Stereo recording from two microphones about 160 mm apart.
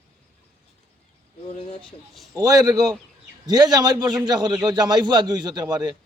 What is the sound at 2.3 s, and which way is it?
A man's voice, 25° right (ahead or behind).